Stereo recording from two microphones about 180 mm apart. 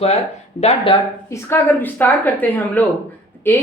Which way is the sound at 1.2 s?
15° left (ahead or behind).